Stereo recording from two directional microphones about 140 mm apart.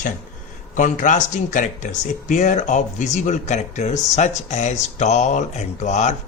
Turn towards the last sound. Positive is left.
turn(degrees=55)  # may be behind; listen again after turning